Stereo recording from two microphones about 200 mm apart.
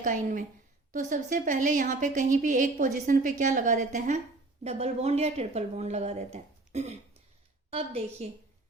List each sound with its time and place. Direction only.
0.0 s a woman's voice: 40° right (ahead or behind)